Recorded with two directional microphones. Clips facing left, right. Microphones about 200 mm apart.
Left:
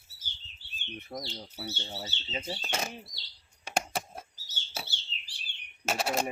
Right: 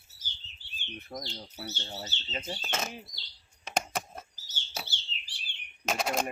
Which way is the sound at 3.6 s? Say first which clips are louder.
Even; 10° left (ahead or behind).